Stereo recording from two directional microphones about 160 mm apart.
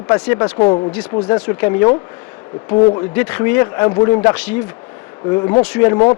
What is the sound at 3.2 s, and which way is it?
Speech, 10° left (ahead or behind).